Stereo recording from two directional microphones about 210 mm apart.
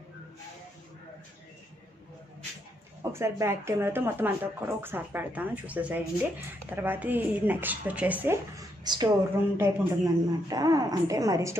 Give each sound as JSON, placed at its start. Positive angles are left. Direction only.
{"t": 3.0, "sound": "speech", "side_deg": -10}